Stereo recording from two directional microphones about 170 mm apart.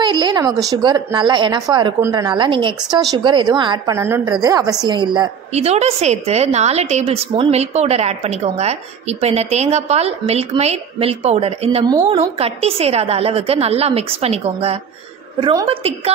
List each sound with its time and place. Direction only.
0.0 s a sound: 25° right (ahead or behind)
0.7 s a woman's voice: 25° right (ahead or behind)
5.5 s a woman's voice: 40° right (ahead or behind)
11.9 s a woman's voice: 20° right (ahead or behind)
12.2 s a woman's voice: 35° right (ahead or behind)